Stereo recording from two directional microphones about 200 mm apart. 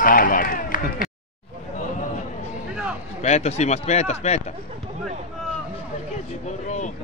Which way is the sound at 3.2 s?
35° left (ahead or behind).